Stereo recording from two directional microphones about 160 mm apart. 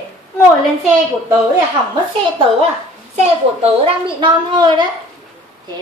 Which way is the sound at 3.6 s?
35° right (ahead or behind).